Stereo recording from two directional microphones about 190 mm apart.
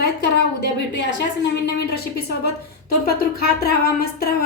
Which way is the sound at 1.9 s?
55° left (ahead or behind).